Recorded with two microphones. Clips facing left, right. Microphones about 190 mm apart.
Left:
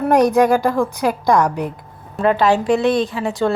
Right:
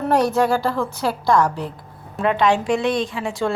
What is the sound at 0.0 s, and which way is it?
A woman's voice, 15° left (ahead or behind).